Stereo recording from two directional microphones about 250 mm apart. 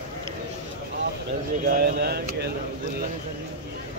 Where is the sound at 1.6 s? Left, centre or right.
Right.